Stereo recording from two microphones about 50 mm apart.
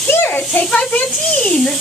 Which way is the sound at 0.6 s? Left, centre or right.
Left.